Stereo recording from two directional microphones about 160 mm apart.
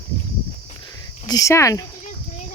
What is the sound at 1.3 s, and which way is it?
Speech, 20° left (ahead or behind).